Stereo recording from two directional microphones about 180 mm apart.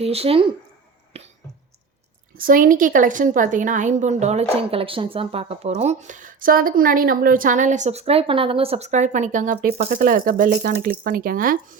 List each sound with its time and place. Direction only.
0.0 s speech: 35° right (ahead or behind)
1.1 s cough: 35° right (ahead or behind)
2.4 s a woman's voice: 50° right (ahead or behind)